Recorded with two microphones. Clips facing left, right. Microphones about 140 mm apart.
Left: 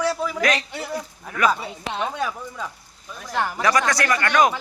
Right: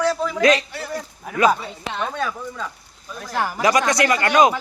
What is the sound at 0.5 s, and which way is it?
Speech, 20° left (ahead or behind).